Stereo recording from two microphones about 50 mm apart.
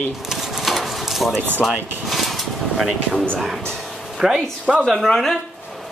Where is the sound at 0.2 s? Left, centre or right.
Centre.